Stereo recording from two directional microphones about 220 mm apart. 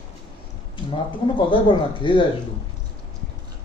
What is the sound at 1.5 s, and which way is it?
Speech, 20° left (ahead or behind).